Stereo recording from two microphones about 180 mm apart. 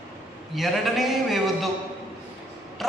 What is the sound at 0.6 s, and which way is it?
Speech, centre (ahead or behind).